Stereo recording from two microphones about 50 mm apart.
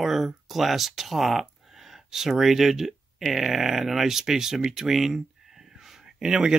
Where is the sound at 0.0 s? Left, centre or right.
Centre.